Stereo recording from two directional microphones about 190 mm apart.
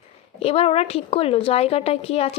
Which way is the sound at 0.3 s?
30° left (ahead or behind).